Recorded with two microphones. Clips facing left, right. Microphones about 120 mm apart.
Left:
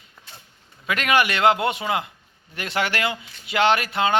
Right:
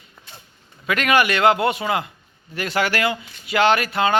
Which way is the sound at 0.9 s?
25° left (ahead or behind).